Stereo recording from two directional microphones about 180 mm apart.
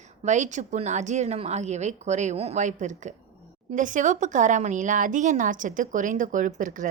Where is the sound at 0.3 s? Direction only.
45° right (ahead or behind).